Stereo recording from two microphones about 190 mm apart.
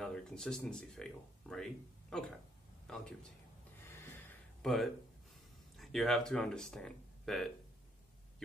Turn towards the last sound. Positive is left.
turn(degrees=0)  # may be behind; listen again after turning